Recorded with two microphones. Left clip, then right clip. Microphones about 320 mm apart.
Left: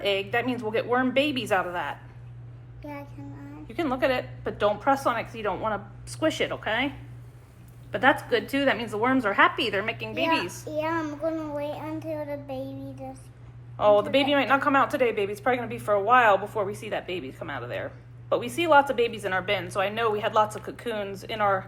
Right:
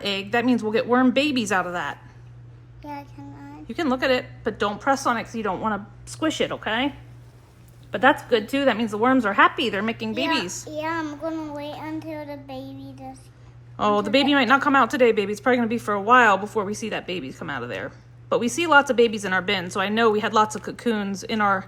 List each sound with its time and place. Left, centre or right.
0.0 s a woman's voice: right
2.8 s child singing: centre
3.7 s a woman's voice: right
10.7 s child singing: centre
11.3 s child singing: centre
13.7 s speech: right